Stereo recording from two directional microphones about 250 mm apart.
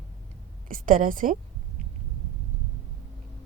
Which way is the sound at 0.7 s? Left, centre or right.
Right.